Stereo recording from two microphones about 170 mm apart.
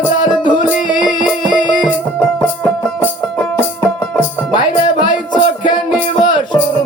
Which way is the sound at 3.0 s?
10° left (ahead or behind).